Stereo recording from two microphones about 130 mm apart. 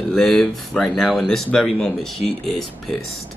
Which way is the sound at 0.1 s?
Centre (ahead or behind).